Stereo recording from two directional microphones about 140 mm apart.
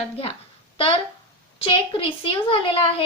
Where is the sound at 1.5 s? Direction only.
40° left (ahead or behind).